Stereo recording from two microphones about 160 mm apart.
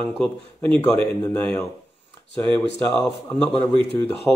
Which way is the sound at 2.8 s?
10° left (ahead or behind).